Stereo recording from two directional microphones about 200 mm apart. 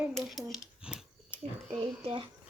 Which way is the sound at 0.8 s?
5° right (ahead or behind).